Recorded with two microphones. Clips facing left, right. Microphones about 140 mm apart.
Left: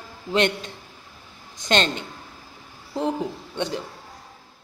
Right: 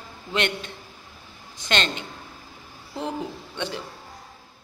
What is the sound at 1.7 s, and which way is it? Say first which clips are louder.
Speech: left 4 dB; 40° left (ahead or behind).